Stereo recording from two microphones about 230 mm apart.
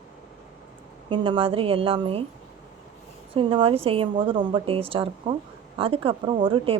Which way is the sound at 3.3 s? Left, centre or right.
Right.